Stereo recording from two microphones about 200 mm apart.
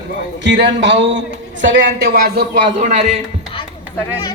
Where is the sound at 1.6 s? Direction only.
50° right (ahead or behind).